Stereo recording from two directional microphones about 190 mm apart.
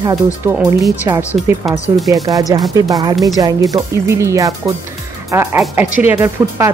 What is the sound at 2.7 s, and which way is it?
Speech, 20° right (ahead or behind).